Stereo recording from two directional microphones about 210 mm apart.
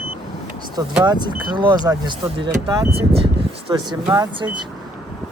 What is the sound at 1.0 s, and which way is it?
Speech, 20° right (ahead or behind).